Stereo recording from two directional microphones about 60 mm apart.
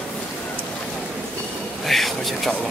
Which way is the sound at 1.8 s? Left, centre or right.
Centre.